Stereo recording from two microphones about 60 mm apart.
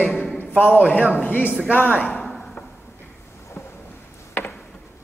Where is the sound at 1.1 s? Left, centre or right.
Left.